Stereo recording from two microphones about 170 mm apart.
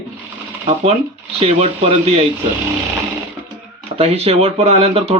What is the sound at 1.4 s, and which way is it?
Speech, 40° right (ahead or behind).